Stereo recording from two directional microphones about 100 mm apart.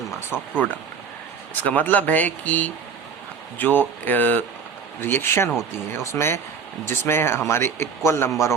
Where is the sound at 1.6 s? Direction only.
15° left (ahead or behind).